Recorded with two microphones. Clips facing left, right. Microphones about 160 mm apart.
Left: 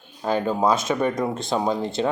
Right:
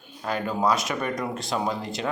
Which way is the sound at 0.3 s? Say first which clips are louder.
Left 4 dB; 30° left (ahead or behind).